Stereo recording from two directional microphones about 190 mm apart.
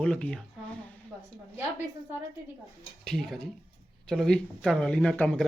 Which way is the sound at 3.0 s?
Centre (ahead or behind).